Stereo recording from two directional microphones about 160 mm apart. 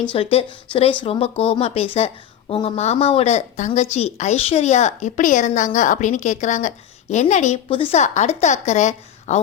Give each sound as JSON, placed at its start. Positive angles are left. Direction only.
{"t": 0.1, "sound": "a woman's voice", "side_deg": 35}
{"t": 7.7, "sound": "a woman's voice", "side_deg": 35}